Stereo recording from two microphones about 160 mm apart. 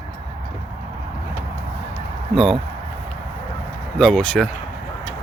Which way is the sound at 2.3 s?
Centre (ahead or behind).